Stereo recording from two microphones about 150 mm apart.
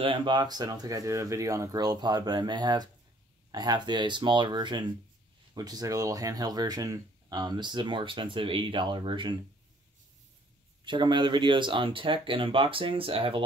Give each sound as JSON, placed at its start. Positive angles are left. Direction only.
{"t": 0.0, "sound": "speech", "side_deg": -35}
{"t": 10.9, "sound": "speech", "side_deg": -30}